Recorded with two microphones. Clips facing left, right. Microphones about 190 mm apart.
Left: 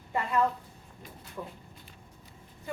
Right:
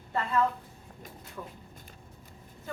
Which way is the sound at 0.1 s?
15° left (ahead or behind).